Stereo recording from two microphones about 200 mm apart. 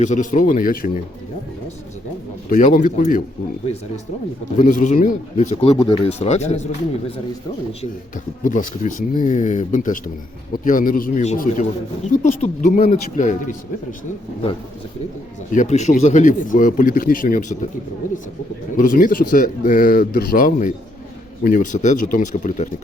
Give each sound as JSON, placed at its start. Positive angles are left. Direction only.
{"t": 0.0, "sound": "speech", "side_deg": 40}
{"t": 2.7, "sound": "speech", "side_deg": 40}
{"t": 4.5, "sound": "speech", "side_deg": 40}
{"t": 15.5, "sound": "speech", "side_deg": 35}
{"t": 18.8, "sound": "speech", "side_deg": 45}